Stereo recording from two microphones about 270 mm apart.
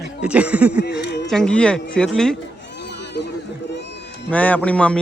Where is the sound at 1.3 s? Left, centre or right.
Centre.